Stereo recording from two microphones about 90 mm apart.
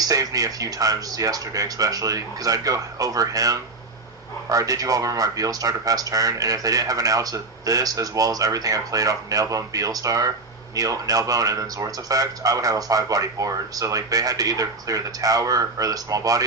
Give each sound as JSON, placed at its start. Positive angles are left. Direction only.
{"t": 0.0, "sound": "speech", "side_deg": -40}